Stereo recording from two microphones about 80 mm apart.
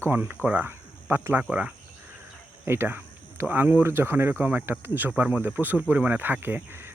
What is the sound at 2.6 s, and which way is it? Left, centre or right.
Speech, right.